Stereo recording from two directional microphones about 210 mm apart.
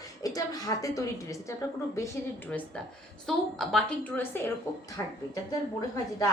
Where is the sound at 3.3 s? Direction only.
Centre (ahead or behind).